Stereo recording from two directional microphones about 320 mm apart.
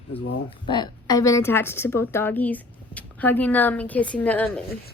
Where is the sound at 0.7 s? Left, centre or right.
Centre.